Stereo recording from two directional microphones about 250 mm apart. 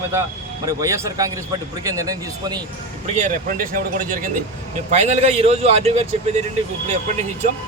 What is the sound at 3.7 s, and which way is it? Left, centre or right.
A man's voice, right.